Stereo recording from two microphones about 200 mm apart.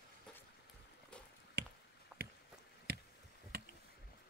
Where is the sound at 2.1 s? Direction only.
5° right (ahead or behind).